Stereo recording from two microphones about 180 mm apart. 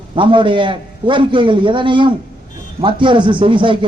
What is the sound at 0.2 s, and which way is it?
A man's voice, 30° right (ahead or behind).